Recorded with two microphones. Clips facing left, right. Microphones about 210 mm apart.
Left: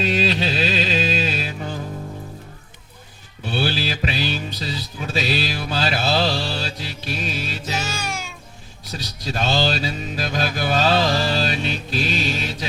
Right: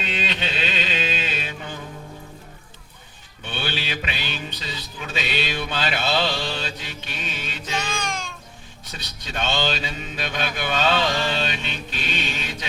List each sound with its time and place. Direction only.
0.0 s music: 35° left (ahead or behind)
3.4 s music: 35° left (ahead or behind)
7.8 s music: 5° left (ahead or behind)
8.9 s mantra: 35° left (ahead or behind)